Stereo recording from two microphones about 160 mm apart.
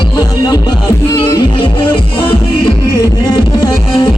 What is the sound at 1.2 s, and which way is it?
Music, 30° left (ahead or behind).